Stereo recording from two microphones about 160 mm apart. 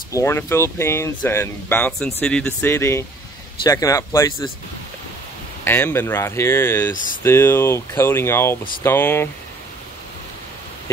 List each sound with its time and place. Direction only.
0.1 s speech: 15° left (ahead or behind)
5.6 s speech: 15° left (ahead or behind)